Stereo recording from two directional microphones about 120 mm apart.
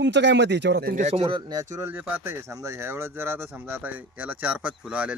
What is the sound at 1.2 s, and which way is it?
Speech, 40° right (ahead or behind).